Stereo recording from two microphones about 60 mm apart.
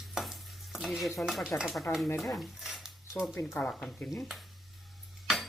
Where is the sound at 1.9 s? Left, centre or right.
Left.